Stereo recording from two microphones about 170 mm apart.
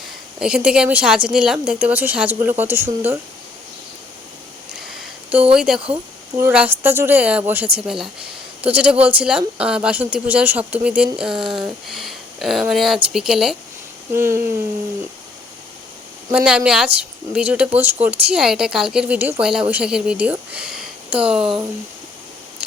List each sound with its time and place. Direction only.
0.3 s a woman's voice: 5° right (ahead or behind)
4.9 s a sound: 5° right (ahead or behind)
6.3 s a woman's voice: 10° right (ahead or behind)
14.1 s a woman's voice: 15° right (ahead or behind)
16.3 s speech: 5° right (ahead or behind)